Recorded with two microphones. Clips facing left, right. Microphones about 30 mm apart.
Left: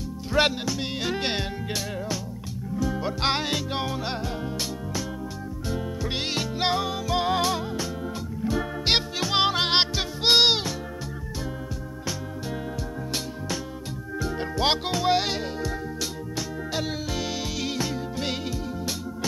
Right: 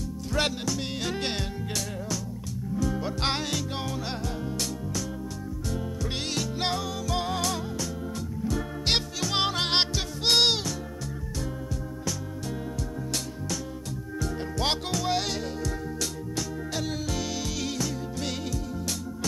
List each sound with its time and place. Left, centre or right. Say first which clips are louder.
0.3 s music: left 5 dB; left
2.7 s music: left 2 dB; centre
5.7 s music: left 3 dB; left
14.2 s music: left 4 dB; left